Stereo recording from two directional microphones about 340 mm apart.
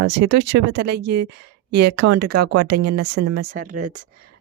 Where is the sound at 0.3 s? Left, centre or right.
Right.